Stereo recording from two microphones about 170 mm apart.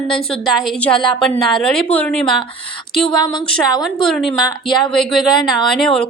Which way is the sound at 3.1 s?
25° left (ahead or behind).